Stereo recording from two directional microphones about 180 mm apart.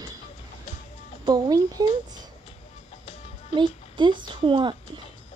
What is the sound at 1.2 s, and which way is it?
Speech, 20° right (ahead or behind).